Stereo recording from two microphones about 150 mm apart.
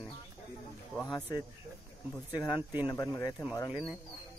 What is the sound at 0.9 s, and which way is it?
Speech, 5° left (ahead or behind).